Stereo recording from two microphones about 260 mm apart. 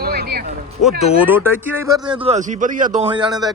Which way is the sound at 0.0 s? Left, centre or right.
Right.